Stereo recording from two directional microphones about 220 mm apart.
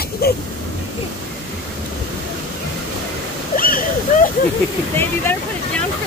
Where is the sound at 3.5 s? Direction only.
40° left (ahead or behind).